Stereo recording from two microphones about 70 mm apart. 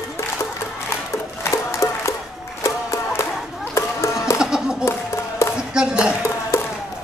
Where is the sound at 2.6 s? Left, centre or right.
Left.